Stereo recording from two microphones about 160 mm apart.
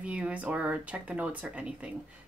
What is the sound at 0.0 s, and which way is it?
Speech, 10° right (ahead or behind).